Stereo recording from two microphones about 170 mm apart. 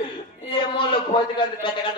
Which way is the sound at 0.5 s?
30° left (ahead or behind).